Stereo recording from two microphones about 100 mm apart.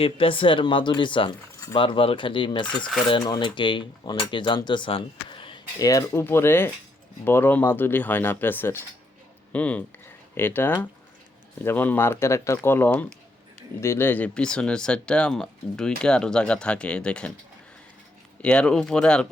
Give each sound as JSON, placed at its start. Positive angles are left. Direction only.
{"t": 0.0, "sound": "speech", "side_deg": 65}
{"t": 5.8, "sound": "speech", "side_deg": 35}
{"t": 18.4, "sound": "speech", "side_deg": 10}